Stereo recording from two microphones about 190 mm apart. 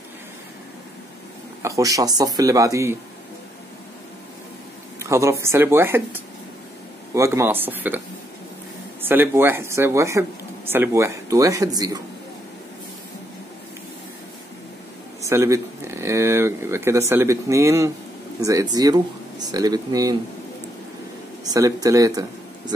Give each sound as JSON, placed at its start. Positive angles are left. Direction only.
{"t": 1.6, "sound": "speech", "side_deg": -15}
{"t": 4.9, "sound": "speech", "side_deg": -15}
{"t": 9.0, "sound": "speech", "side_deg": -10}
{"t": 15.2, "sound": "speech", "side_deg": -15}
{"t": 21.5, "sound": "speech", "side_deg": -20}